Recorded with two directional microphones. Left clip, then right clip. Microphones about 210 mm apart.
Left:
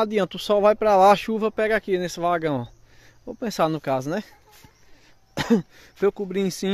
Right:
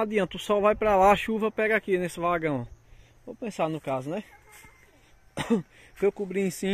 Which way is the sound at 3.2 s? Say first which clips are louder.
Left 6 dB; 35° left (ahead or behind).